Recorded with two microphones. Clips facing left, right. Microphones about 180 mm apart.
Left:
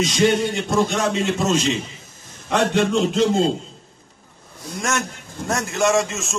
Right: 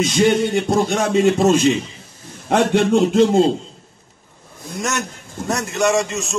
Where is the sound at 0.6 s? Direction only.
55° right (ahead or behind).